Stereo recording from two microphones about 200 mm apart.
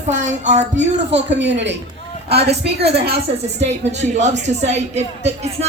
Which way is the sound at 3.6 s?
35° right (ahead or behind).